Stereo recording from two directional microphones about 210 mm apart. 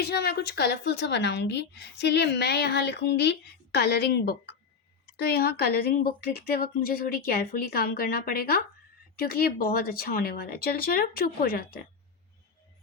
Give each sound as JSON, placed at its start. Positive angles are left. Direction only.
{"t": 0.1, "sound": "a woman's voice", "side_deg": 50}